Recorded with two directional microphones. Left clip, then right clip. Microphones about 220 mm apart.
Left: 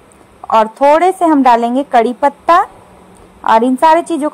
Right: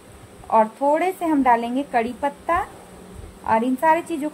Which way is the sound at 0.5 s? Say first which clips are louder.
Left 9 dB; 35° left (ahead or behind).